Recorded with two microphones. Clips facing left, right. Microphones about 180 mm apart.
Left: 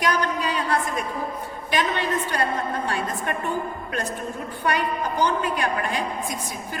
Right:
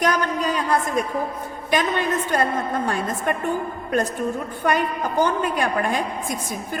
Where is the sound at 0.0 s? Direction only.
45° right (ahead or behind).